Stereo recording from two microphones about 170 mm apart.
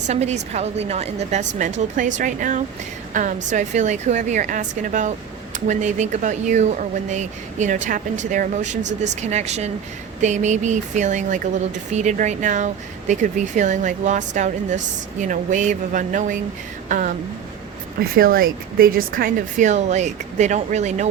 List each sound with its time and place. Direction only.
0.1 s speech: 40° right (ahead or behind)
18.0 s speech: 60° right (ahead or behind); by 21.1 s 45° right (ahead or behind)